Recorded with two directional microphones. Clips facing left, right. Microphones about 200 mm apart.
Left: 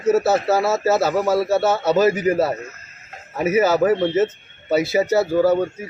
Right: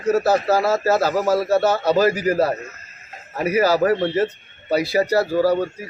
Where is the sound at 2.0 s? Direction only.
25° left (ahead or behind).